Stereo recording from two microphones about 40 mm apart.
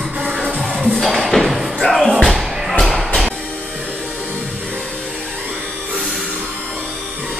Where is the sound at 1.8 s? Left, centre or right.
Centre.